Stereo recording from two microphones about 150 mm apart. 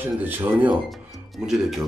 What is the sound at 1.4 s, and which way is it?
Speech, centre (ahead or behind).